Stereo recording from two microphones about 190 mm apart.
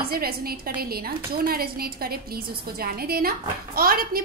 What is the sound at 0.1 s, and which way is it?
A woman's voice, 50° right (ahead or behind).